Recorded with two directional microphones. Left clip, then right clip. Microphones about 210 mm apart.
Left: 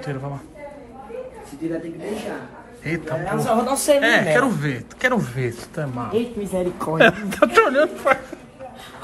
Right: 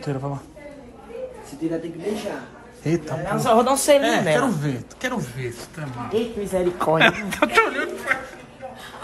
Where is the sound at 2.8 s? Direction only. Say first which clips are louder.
Right 1 dB; 30° right (ahead or behind).